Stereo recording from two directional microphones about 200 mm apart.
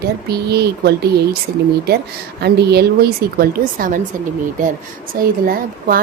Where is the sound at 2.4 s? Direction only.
55° right (ahead or behind).